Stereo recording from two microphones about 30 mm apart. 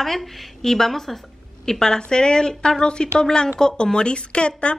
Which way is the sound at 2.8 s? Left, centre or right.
Left.